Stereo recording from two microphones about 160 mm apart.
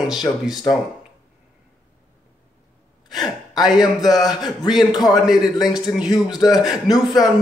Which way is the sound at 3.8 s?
25° left (ahead or behind).